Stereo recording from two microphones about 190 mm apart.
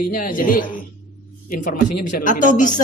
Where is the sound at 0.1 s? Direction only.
45° left (ahead or behind).